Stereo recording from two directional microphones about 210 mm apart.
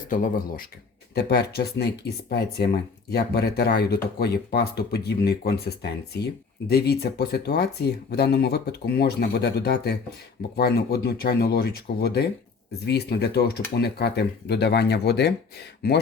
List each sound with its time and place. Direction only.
0.1 s speech: 40° left (ahead or behind)